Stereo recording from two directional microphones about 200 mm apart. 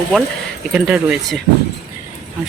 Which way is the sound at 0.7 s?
5° right (ahead or behind).